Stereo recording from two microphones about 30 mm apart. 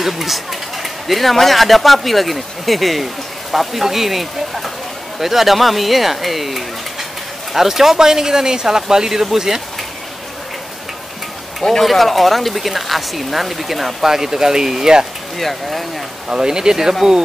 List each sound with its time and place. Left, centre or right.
0.0 s speech: centre
11.8 s speech: centre
14.0 s speech: centre
15.3 s speech: centre
16.3 s speech: right